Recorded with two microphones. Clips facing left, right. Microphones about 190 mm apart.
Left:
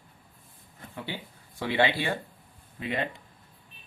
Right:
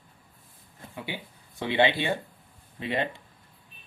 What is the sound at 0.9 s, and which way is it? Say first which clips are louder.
Speech: even; 15° right (ahead or behind).